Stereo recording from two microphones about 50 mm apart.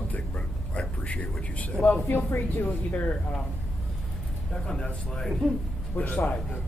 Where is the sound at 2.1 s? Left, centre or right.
Left.